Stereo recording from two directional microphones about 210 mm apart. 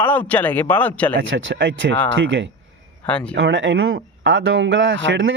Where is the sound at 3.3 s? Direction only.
60° right (ahead or behind).